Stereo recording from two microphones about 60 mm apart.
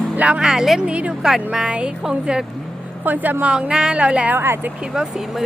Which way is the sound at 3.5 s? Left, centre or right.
Centre.